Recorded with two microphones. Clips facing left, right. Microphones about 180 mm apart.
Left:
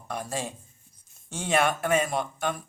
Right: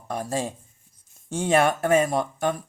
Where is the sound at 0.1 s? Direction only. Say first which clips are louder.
Right 5 dB; 40° right (ahead or behind).